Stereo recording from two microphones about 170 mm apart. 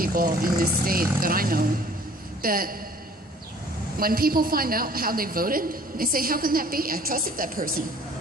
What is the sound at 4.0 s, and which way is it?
A woman's voice, 60° right (ahead or behind).